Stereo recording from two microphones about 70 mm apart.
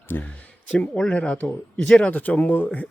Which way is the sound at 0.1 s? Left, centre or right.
Left.